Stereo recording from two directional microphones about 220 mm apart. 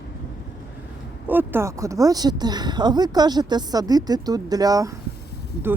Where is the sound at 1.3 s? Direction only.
10° right (ahead or behind).